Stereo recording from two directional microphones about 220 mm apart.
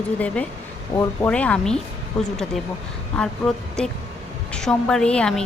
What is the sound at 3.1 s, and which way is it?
A woman's voice, 5° left (ahead or behind).